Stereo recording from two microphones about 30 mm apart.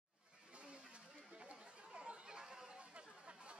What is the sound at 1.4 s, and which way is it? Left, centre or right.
Chatter, right.